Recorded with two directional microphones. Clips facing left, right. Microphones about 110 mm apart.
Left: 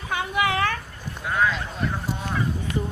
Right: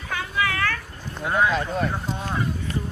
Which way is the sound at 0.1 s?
20° left (ahead or behind).